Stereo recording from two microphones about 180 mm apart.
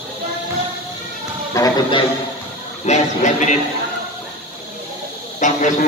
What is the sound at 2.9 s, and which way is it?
Speech, 40° left (ahead or behind).